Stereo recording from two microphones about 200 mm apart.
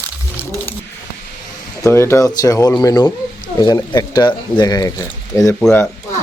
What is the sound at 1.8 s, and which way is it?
Speech, 15° left (ahead or behind).